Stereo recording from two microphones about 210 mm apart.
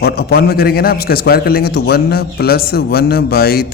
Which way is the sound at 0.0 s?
50° left (ahead or behind).